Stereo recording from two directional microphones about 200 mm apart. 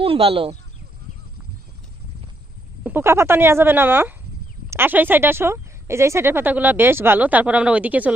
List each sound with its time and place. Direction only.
0.0 s speech: 30° right (ahead or behind)
2.8 s speech: 10° right (ahead or behind)